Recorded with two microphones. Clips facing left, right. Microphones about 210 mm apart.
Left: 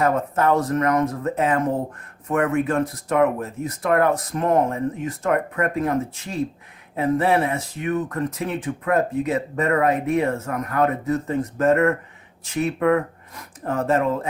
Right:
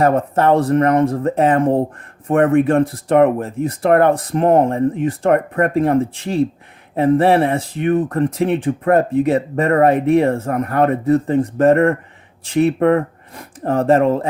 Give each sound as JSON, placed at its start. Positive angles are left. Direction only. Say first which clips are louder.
{"t": 0.0, "sound": "speech", "louder": "right 5 dB", "side_deg": -30}